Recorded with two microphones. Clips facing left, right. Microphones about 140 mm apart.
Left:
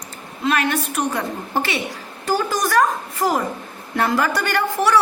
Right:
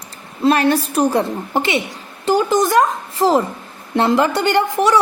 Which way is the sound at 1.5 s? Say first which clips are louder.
Right 2 dB; 20° right (ahead or behind).